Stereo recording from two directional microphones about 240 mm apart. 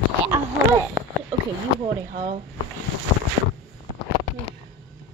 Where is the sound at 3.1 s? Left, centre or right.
Left.